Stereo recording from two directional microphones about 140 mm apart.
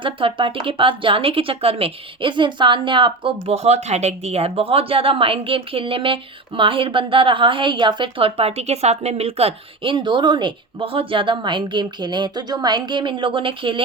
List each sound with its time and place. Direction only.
0.0 s a woman's voice: 40° right (ahead or behind)